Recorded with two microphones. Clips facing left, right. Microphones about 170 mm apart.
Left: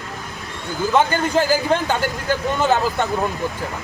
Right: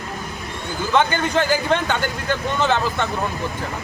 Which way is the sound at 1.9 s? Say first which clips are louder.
Left 2 dB; 35° left (ahead or behind).